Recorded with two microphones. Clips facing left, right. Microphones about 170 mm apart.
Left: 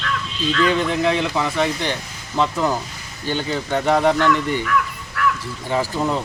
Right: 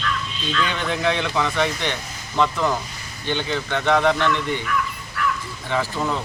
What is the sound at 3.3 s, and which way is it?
Speech, 40° left (ahead or behind).